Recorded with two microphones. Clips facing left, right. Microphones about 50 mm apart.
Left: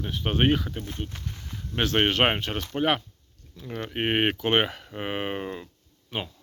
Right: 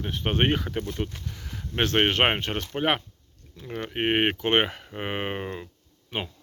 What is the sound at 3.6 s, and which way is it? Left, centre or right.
Speech, centre.